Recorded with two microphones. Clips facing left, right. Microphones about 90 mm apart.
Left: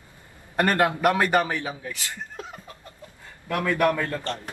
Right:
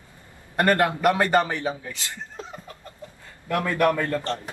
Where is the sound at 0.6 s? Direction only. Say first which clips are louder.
Right 1 dB; 20° left (ahead or behind).